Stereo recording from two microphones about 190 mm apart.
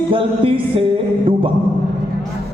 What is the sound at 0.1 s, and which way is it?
Speech, 30° right (ahead or behind).